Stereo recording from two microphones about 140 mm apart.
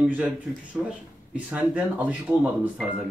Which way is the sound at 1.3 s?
10° right (ahead or behind).